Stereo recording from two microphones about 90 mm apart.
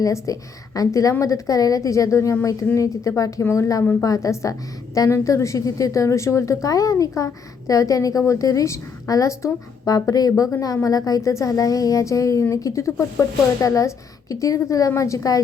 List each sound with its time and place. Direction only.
0.0 s a woman's voice: 40° left (ahead or behind)